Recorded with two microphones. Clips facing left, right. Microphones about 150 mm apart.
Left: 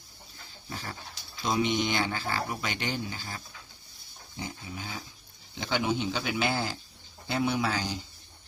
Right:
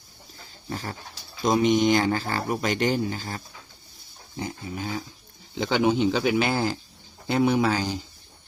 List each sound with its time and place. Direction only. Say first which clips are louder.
1.5 s a man's voice: right 8 dB; 45° right (ahead or behind)